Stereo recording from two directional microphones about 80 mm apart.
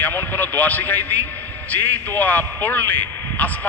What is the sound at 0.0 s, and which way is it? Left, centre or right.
A man's voice, left.